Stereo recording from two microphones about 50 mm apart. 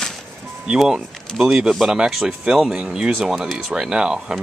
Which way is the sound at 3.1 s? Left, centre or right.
Centre.